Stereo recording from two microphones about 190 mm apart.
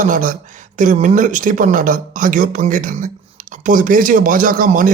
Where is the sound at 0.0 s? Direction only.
45° right (ahead or behind).